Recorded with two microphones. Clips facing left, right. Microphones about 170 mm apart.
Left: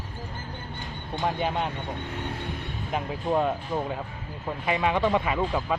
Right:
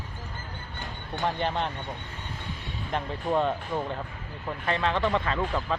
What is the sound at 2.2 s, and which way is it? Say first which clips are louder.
Speech: left 7 dB; 65° left (ahead or behind).